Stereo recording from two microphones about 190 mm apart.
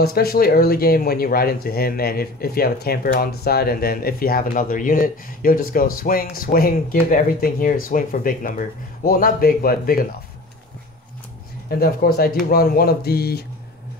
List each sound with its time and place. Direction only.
0.0 s speech: 55° left (ahead or behind)
11.7 s speech: 50° left (ahead or behind)